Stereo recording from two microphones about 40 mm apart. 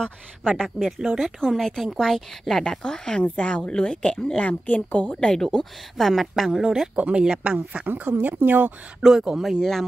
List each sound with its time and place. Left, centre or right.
0.5 s a woman's voice: centre
2.6 s speech: centre
3.3 s a woman's voice: left
3.7 s speech: left
4.4 s a woman's voice: left
5.2 s speech: centre
6.0 s a woman's voice: centre
6.5 s speech: centre
7.0 s speech: right
7.9 s speech: right
9.0 s speech: centre
9.6 s a woman's voice: centre